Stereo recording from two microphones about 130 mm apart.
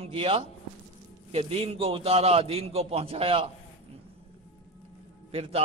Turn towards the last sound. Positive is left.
turn(degrees=-50)  # may be behind; listen again after turning